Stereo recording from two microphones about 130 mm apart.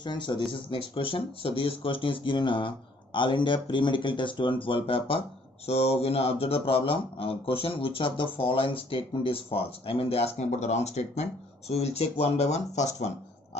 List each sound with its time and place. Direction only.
0.0 s speech: 35° left (ahead or behind); by 13.1 s 60° left (ahead or behind)